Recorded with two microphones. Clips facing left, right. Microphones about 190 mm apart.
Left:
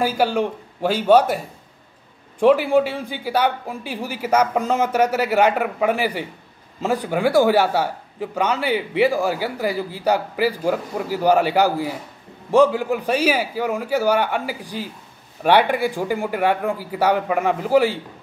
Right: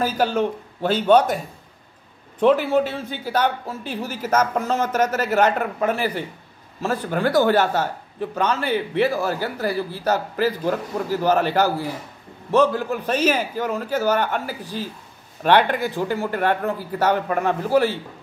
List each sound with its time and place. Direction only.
0.0 s a man's voice: 10° left (ahead or behind)
2.4 s a man's voice: 10° left (ahead or behind)